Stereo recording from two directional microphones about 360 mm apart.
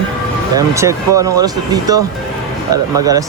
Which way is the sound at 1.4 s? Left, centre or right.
Centre.